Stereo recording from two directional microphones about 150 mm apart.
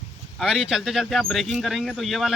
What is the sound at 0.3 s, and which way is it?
Speech, 5° right (ahead or behind).